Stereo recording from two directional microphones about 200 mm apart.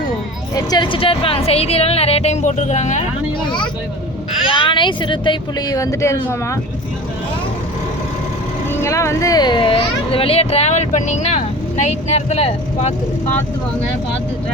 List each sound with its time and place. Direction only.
0.5 s speech: 20° left (ahead or behind)
4.4 s speech: 25° left (ahead or behind)
8.7 s speech: 15° left (ahead or behind); by 12.9 s 30° left (ahead or behind)